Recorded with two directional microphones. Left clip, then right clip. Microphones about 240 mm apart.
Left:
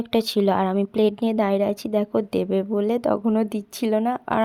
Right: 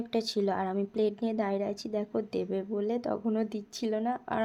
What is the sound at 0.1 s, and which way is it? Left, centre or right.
Speech, left.